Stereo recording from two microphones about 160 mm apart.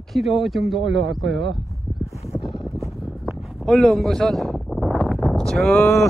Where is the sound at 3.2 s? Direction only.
Centre (ahead or behind).